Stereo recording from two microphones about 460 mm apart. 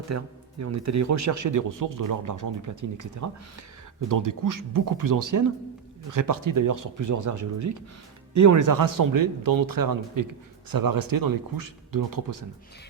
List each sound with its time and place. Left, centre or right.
0.1 s speech: right